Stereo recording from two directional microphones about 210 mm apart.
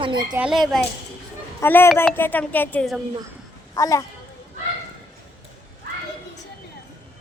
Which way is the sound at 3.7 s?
15° left (ahead or behind).